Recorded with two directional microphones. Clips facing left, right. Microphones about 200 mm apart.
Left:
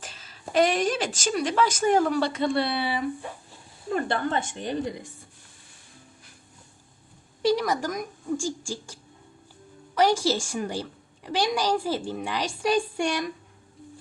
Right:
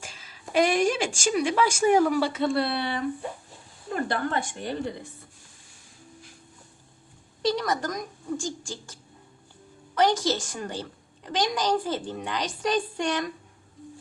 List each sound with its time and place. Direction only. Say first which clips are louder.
0.0 s a woman's voice: left 2 dB; 10° right (ahead or behind)
4.1 s a woman's voice: left 1 dB; 25° left (ahead or behind)
7.4 s a woman's voice: left 2 dB; 10° left (ahead or behind)